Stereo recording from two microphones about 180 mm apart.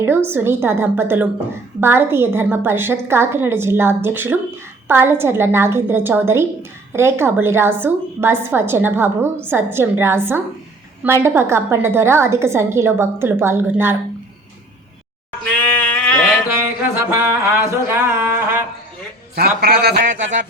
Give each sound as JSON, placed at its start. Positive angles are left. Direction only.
{"t": 0.0, "sound": "a woman's voice", "side_deg": -10}
{"t": 15.5, "sound": "sheep", "side_deg": 5}
{"t": 16.5, "sound": "a woman's voice", "side_deg": -15}
{"t": 19.4, "sound": "speech", "side_deg": -60}